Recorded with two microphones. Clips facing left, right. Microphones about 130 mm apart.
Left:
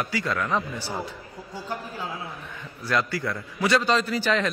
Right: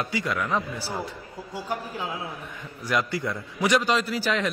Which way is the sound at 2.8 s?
20° right (ahead or behind).